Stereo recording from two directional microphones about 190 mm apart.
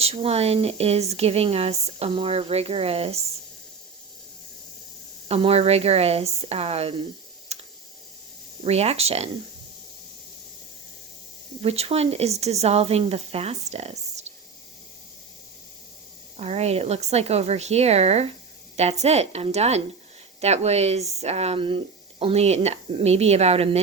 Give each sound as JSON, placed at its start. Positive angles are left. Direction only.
{"t": 0.0, "sound": "speech", "side_deg": -30}
{"t": 5.3, "sound": "speech", "side_deg": -30}
{"t": 7.5, "sound": "clicking", "side_deg": -35}
{"t": 8.6, "sound": "speech", "side_deg": -35}
{"t": 11.6, "sound": "speech", "side_deg": -30}
{"t": 16.4, "sound": "speech", "side_deg": -35}